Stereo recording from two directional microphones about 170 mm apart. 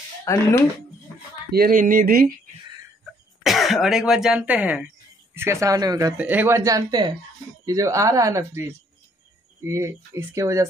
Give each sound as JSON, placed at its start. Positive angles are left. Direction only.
{"t": 0.2, "sound": "speech", "side_deg": 15}
{"t": 1.5, "sound": "speech", "side_deg": -55}
{"t": 3.4, "sound": "speech", "side_deg": 0}
{"t": 6.1, "sound": "speech", "side_deg": -10}